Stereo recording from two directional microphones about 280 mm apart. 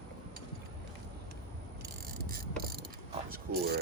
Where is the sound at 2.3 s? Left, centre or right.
Right.